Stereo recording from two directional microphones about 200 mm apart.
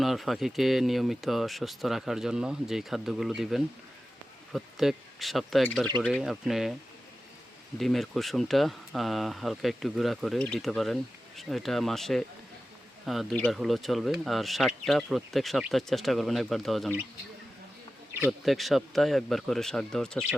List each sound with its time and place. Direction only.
0.0 s speech: centre (ahead or behind)
7.8 s speech: centre (ahead or behind)
18.1 s speech: 5° right (ahead or behind)